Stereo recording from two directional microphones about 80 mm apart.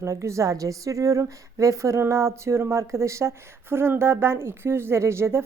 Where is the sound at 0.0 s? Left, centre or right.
Right.